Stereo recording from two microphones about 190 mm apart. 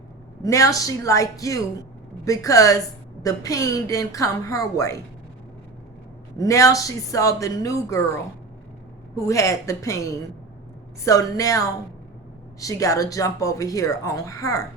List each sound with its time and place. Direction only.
0.4 s speech: 15° left (ahead or behind)
6.3 s speech: 15° left (ahead or behind)